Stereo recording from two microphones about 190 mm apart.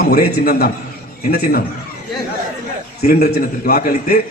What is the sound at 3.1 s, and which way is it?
Speech, 55° left (ahead or behind).